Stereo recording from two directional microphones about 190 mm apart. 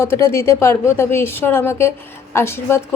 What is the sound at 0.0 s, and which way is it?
Speech, 15° left (ahead or behind).